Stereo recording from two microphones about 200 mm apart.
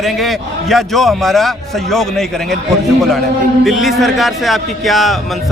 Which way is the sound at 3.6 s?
Centre (ahead or behind).